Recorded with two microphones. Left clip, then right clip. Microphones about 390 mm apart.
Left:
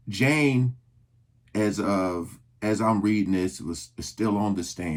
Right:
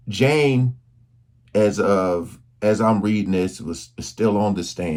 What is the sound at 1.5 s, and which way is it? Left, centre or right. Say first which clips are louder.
Speech: right 9 dB; centre.